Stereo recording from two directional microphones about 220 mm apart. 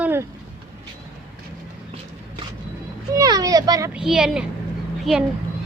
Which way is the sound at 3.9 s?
Centre (ahead or behind).